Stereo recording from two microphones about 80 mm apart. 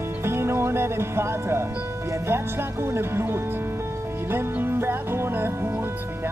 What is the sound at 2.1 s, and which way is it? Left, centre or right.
Speech, right.